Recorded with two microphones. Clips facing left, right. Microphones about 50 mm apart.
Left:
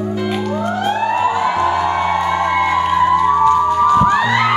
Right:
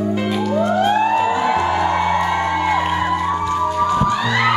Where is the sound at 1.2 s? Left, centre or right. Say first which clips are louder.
Left 1 dB; left.